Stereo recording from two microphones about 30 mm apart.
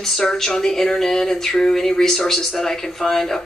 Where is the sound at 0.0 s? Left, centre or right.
Centre.